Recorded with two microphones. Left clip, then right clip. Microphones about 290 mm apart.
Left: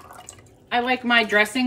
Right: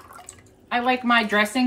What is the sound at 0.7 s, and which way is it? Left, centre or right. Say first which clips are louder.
Speech: even; centre.